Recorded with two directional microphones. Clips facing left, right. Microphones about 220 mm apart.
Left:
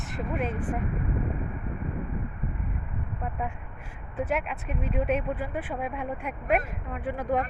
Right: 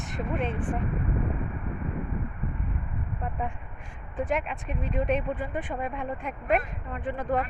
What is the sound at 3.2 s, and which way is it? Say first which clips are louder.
Speech: even; 5° left (ahead or behind).